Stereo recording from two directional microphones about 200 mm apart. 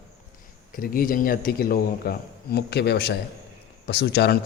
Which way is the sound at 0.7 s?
45° left (ahead or behind).